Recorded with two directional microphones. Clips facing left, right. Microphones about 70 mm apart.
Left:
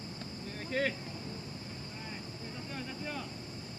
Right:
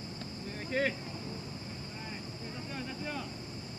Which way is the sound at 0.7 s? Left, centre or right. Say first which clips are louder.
Right 1 dB; centre.